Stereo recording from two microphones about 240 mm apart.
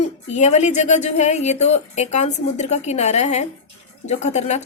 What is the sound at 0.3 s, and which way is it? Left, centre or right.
A woman's voice, left.